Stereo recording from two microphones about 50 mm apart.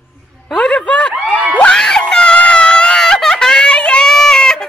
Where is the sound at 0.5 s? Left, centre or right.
Left.